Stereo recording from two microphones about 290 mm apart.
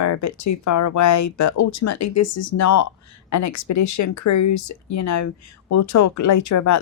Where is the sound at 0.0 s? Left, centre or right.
Left.